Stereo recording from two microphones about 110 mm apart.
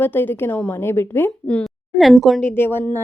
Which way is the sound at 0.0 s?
15° left (ahead or behind).